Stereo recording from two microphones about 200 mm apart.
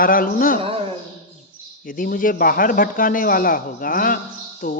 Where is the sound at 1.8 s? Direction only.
45° left (ahead or behind).